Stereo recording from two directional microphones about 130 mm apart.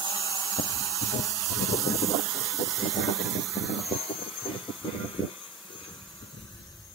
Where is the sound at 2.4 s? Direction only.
Centre (ahead or behind).